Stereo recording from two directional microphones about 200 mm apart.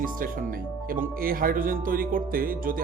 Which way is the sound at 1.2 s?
45° right (ahead or behind).